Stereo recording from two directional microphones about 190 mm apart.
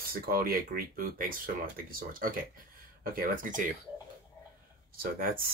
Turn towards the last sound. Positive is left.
turn(degrees=-50)  # may be behind; listen again after turning